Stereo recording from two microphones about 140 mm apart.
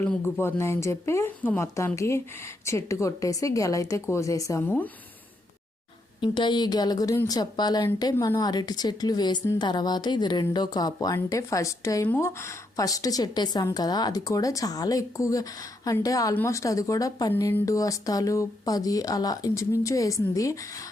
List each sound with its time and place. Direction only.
0.0 s speech: 15° left (ahead or behind)
6.1 s a woman's voice: 35° left (ahead or behind); by 12.3 s 15° left (ahead or behind)
12.7 s speech: 25° left (ahead or behind)